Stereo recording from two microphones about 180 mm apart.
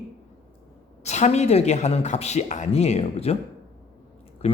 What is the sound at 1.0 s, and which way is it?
Speech, 40° left (ahead or behind).